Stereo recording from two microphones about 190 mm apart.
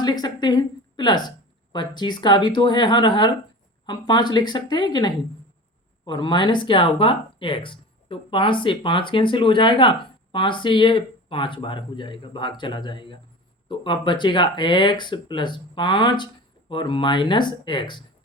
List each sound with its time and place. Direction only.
0.0 s speech: 20° left (ahead or behind)